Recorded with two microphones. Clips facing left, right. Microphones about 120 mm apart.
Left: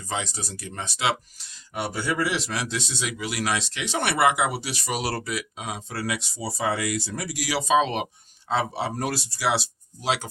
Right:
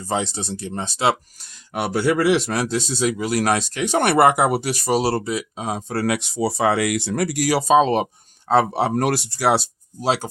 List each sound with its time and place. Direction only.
0.0 s speech: 30° right (ahead or behind)
1.7 s speech: 70° right (ahead or behind); by 8.0 s 40° right (ahead or behind)
8.4 s speech: 50° right (ahead or behind); by 10.2 s 35° right (ahead or behind)